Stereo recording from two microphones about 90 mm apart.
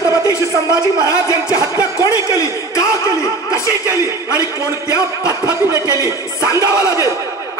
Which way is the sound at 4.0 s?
35° right (ahead or behind).